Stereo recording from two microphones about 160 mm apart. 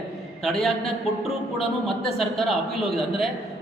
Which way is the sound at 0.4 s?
5° left (ahead or behind).